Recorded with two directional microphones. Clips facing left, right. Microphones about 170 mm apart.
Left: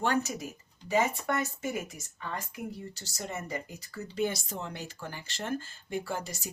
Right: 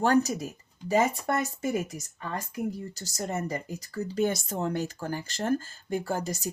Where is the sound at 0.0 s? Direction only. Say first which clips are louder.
Right 6 dB; 40° right (ahead or behind).